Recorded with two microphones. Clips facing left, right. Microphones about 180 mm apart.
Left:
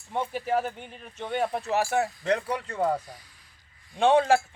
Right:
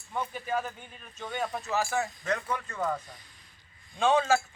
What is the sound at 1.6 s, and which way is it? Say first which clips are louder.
Speech: left 2 dB; 60° left (ahead or behind).